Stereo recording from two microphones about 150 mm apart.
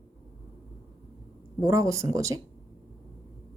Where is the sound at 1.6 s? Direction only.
20° right (ahead or behind).